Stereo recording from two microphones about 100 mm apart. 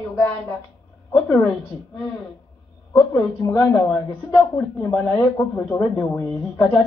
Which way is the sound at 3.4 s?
25° left (ahead or behind).